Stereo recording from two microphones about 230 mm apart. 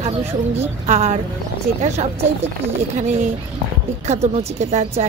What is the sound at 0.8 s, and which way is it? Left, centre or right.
Speech, right.